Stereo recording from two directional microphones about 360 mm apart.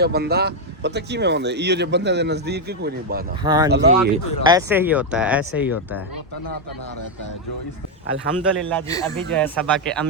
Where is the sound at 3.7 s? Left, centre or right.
Right.